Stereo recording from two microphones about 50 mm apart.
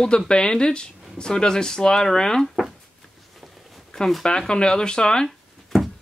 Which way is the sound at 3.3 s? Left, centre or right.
Centre.